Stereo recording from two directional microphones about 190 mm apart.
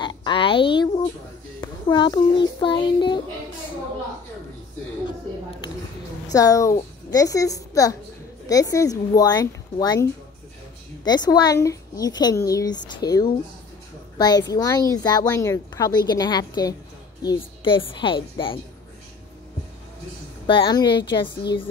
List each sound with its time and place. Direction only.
0.0 s a sound: 25° left (ahead or behind)
1.6 s child singing: 25° left (ahead or behind)
6.3 s a woman's voice: 20° left (ahead or behind)
11.1 s a woman's voice: 20° left (ahead or behind)
20.4 s a woman's voice: 25° left (ahead or behind)